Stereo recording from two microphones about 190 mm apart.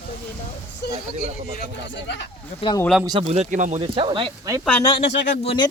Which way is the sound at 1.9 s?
70° left (ahead or behind).